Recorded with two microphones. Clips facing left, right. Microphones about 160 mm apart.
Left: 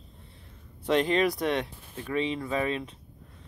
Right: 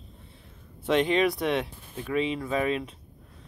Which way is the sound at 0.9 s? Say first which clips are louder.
Right 1 dB; centre (ahead or behind).